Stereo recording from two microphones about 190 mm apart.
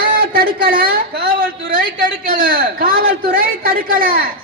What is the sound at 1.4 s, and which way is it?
A man's voice, 50° right (ahead or behind).